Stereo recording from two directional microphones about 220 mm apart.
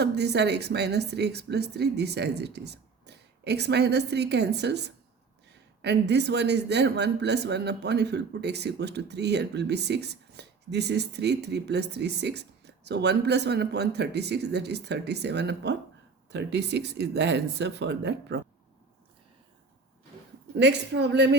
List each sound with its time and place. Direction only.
0.0 s speech: 50° right (ahead or behind)
20.6 s speech: 50° right (ahead or behind)